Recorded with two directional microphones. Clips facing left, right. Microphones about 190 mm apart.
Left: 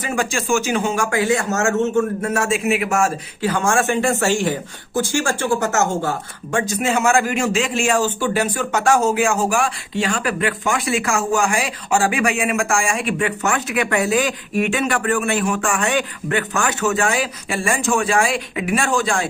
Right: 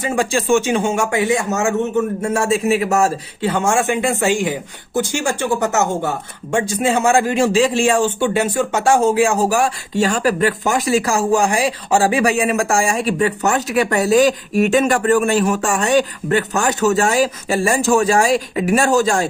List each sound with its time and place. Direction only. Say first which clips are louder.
0.0 s a man's voice: right 4 dB; 30° right (ahead or behind); by 2.0 s 15° right (ahead or behind)
2.2 s a man's voice: right 3 dB; 30° right (ahead or behind)